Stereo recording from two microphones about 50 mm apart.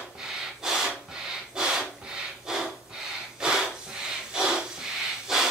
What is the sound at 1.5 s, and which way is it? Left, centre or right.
Breathing, centre.